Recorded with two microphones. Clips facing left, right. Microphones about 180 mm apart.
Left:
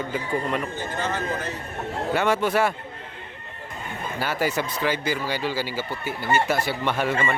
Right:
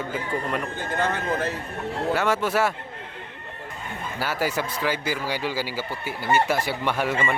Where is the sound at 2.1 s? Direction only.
Centre (ahead or behind).